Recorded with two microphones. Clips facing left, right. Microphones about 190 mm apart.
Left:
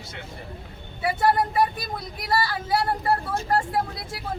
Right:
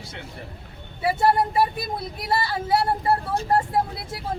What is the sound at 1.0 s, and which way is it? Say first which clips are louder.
Speech: right 2 dB; 25° right (ahead or behind).